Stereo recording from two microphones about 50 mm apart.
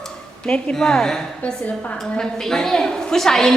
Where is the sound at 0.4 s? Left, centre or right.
Centre.